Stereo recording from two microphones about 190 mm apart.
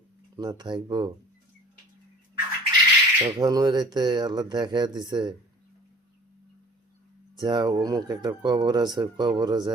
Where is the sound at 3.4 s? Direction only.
20° right (ahead or behind).